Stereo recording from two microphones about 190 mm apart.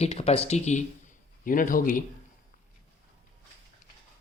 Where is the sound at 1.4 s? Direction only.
45° left (ahead or behind).